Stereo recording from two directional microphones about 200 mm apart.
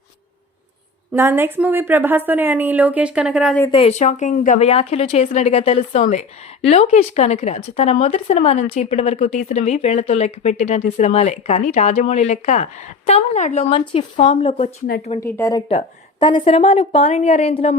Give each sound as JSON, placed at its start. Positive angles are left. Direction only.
{"t": 1.1, "sound": "speech", "side_deg": -10}
{"t": 3.7, "sound": "speech", "side_deg": 30}
{"t": 15.2, "sound": "a woman's voice", "side_deg": 15}
{"t": 16.2, "sound": "speech", "side_deg": 25}